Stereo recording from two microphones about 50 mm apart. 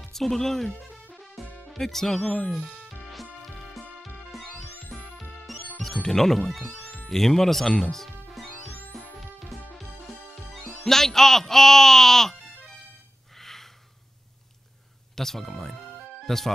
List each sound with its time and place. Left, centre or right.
0.0 s speech: centre
1.2 s music: centre
1.7 s speech: centre
2.2 s speech: left
2.5 s music: centre
4.9 s music: centre
6.0 s speech: centre
8.4 s music: centre
10.9 s speech: centre
13.4 s gasp: centre
15.1 s music: centre